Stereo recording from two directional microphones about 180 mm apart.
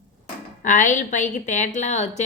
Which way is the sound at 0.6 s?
45° left (ahead or behind).